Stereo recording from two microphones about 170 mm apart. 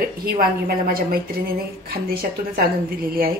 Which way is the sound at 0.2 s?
65° right (ahead or behind).